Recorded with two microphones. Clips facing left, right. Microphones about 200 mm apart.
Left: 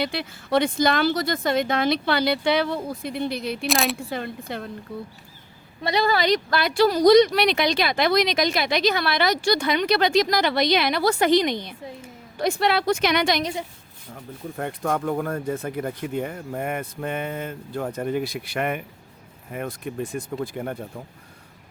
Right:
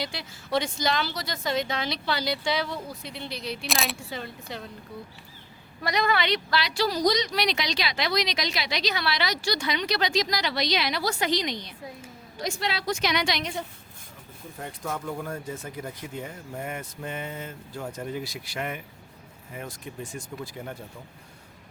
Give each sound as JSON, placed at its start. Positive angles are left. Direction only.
{"t": 0.0, "sound": "speech", "side_deg": 60}
{"t": 3.7, "sound": "speech", "side_deg": 0}
{"t": 3.9, "sound": "speech", "side_deg": 55}
{"t": 5.8, "sound": "speech", "side_deg": 30}
{"t": 14.5, "sound": "speech", "side_deg": 60}